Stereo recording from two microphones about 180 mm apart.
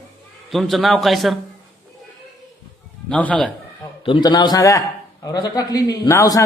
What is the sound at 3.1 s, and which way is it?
Speech, 5° left (ahead or behind).